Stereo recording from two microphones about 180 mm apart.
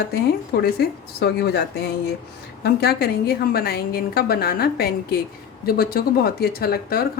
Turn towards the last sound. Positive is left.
turn(degrees=55)  # may be behind; listen again after turning